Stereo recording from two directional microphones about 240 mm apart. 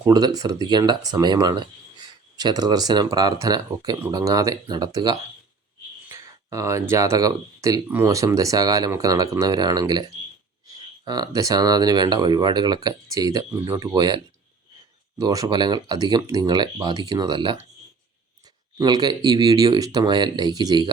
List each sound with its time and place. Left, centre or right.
0.0 s speech: centre
15.2 s speech: centre
18.8 s speech: centre